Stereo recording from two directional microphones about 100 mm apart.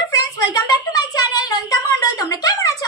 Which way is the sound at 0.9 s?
40° left (ahead or behind).